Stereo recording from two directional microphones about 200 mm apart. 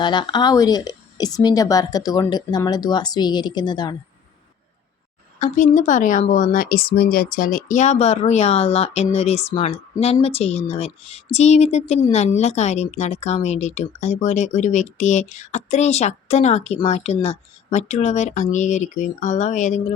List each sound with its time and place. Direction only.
0.0 s speech: 20° left (ahead or behind)
5.4 s a woman's voice: 40° left (ahead or behind)